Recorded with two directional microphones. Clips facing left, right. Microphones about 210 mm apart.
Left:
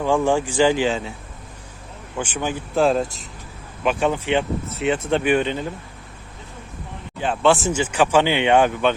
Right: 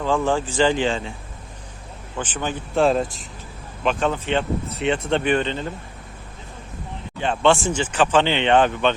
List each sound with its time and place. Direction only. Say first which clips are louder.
0.0 s speech: left 2 dB; 15° left (ahead or behind)
2.1 s speech: left 2 dB; 10° left (ahead or behind)
7.2 s speech: even; 5° left (ahead or behind)